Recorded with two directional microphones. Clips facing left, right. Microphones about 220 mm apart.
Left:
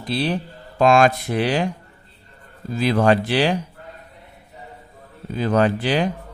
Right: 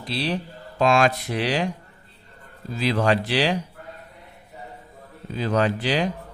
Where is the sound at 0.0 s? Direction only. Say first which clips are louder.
Left 4 dB; 50° left (ahead or behind).